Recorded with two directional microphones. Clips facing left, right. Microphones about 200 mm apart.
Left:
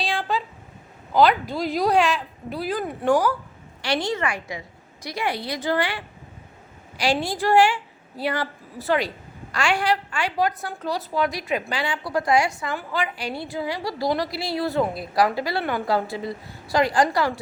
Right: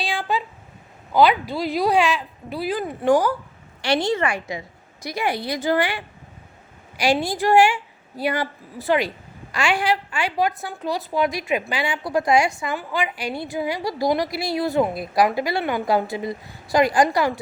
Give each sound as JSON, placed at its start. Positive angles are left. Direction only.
{"t": 0.0, "sound": "a sound", "side_deg": -10}
{"t": 1.1, "sound": "a woman's voice", "side_deg": -5}
{"t": 3.8, "sound": "a woman's voice", "side_deg": -25}
{"t": 7.0, "sound": "a woman's voice", "side_deg": -15}